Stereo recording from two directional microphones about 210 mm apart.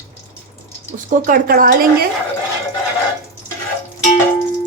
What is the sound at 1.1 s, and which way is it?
Speech, 40° right (ahead or behind).